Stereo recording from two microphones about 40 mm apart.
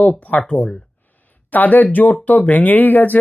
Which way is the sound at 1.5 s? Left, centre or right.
Left.